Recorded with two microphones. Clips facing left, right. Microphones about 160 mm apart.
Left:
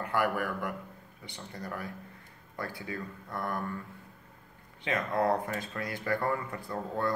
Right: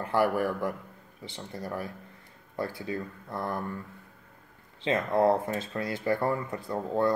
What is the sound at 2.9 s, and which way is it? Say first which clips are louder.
Speech: right 4 dB; 25° right (ahead or behind).